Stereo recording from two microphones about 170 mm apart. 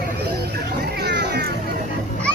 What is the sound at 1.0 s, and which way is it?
Music, 80° right.